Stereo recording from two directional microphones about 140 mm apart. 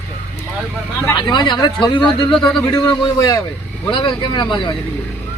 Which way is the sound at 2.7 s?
30° left (ahead or behind).